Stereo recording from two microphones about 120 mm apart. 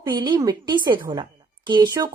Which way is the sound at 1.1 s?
40° right (ahead or behind).